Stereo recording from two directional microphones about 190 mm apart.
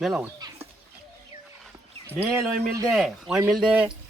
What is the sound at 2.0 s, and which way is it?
Speech, 10° right (ahead or behind).